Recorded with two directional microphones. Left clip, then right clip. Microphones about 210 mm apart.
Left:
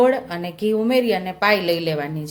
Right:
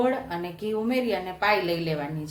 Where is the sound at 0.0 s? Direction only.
45° left (ahead or behind).